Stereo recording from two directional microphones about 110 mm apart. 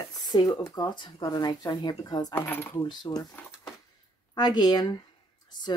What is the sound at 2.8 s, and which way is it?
Speech, 40° left (ahead or behind).